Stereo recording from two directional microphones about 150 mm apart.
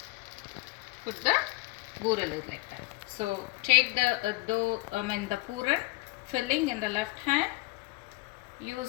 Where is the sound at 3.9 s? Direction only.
60° right (ahead or behind).